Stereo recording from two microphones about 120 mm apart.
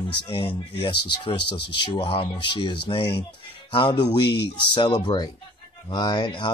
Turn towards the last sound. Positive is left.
turn(degrees=40)  # may be behind; listen again after turning